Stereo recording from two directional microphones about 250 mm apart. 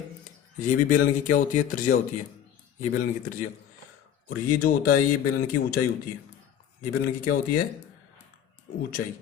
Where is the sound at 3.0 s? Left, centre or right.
Left.